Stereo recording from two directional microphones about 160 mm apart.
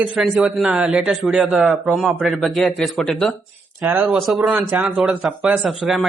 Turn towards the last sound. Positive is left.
turn(degrees=0)  # may be behind; listen again after turning